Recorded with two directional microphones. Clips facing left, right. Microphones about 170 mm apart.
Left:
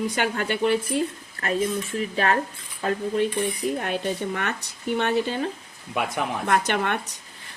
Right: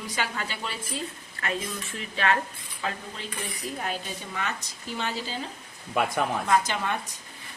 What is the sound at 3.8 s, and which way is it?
Speech, 60° left (ahead or behind).